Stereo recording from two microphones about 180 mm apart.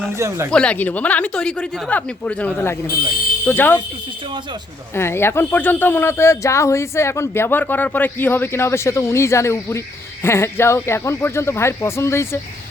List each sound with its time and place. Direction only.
0.2 s speech: 15° right (ahead or behind)
0.5 s speech: 5° left (ahead or behind)
4.9 s speech: 15° left (ahead or behind)